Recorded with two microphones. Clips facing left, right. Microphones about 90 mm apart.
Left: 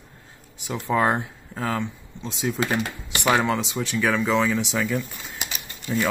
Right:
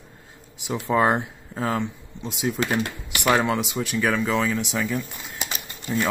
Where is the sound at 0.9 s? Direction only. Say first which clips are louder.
Right 1 dB; 15° right (ahead or behind).